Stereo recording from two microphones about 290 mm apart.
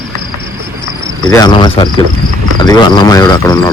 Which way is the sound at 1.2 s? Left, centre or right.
Centre.